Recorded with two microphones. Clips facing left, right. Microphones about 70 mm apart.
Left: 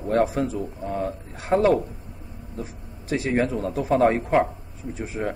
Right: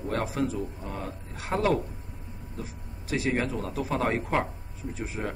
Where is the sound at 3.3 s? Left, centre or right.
Left.